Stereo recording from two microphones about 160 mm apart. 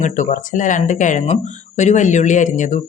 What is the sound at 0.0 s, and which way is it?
Speech, 50° left (ahead or behind).